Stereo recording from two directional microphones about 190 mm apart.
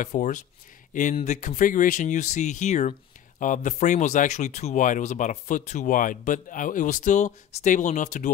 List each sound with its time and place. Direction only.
0.0 s speech: 40° left (ahead or behind)